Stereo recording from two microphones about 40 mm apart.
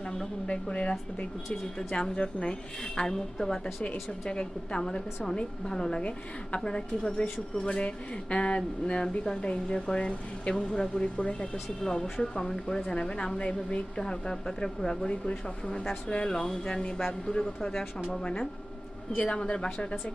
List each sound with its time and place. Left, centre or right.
0.4 s speech: left; by 3.8 s centre
4.3 s speech: left
6.0 s speech: left
11.2 s speech: left
11.5 s speech: centre